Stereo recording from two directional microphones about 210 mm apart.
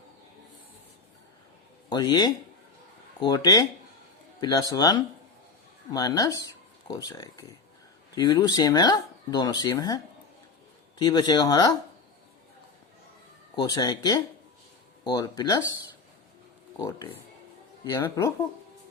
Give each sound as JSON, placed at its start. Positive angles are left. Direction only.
{"t": 1.9, "sound": "speech", "side_deg": 20}
{"t": 13.6, "sound": "speech", "side_deg": 20}
{"t": 16.7, "sound": "speech", "side_deg": 15}